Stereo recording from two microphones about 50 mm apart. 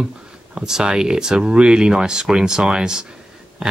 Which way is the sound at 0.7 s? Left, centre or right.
Centre.